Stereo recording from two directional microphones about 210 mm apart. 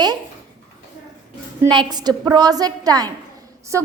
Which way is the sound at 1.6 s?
20° right (ahead or behind).